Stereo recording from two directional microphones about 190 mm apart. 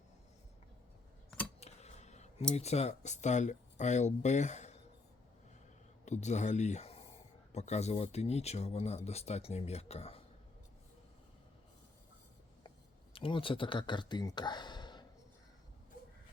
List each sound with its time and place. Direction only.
1.6 s a sound: 35° left (ahead or behind)
2.6 s speech: 35° left (ahead or behind)
6.1 s speech: 35° left (ahead or behind)
13.1 s speech: 25° left (ahead or behind)